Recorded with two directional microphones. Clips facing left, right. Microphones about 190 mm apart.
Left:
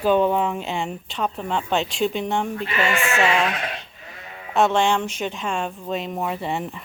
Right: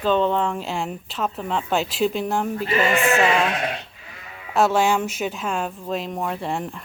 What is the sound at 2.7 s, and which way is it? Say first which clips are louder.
Speech: right 5 dB; 35° right (ahead or behind).